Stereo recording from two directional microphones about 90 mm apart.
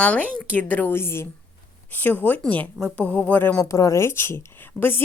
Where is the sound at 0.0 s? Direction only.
15° left (ahead or behind).